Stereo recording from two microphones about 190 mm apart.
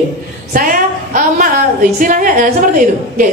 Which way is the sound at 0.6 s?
45° right (ahead or behind).